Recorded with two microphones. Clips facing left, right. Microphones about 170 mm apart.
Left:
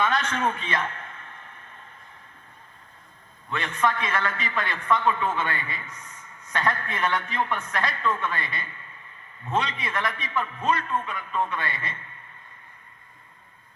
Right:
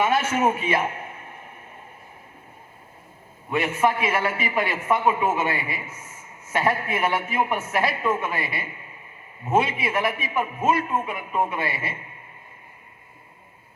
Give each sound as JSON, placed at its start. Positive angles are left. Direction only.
{"t": 0.2, "sound": "a man's voice", "side_deg": -5}
{"t": 1.5, "sound": "vehicle", "side_deg": -10}
{"t": 3.5, "sound": "a man's voice", "side_deg": -10}